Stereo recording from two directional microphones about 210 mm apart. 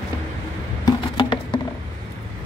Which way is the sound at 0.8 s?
20° left (ahead or behind).